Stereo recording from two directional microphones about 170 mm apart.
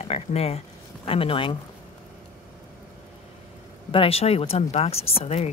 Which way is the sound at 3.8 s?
35° left (ahead or behind).